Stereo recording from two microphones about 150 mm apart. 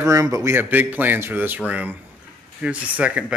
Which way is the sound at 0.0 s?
20° right (ahead or behind).